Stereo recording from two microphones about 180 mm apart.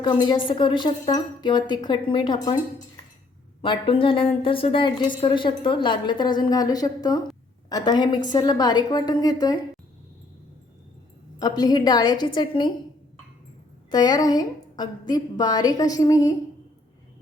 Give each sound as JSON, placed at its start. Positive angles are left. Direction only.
{"t": 0.0, "sound": "a woman's voice", "side_deg": 25}
{"t": 3.6, "sound": "a woman's voice", "side_deg": 30}
{"t": 11.3, "sound": "a woman's voice", "side_deg": 20}
{"t": 13.9, "sound": "a woman's voice", "side_deg": 20}